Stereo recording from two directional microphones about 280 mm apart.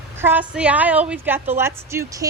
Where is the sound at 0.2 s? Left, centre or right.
Centre.